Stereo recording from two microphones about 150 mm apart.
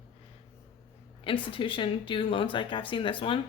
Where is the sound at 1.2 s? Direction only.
35° left (ahead or behind).